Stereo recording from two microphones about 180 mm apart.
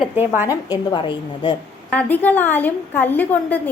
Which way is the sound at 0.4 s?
20° left (ahead or behind).